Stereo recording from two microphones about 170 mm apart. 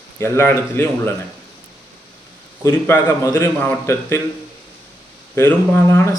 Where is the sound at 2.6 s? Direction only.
15° left (ahead or behind).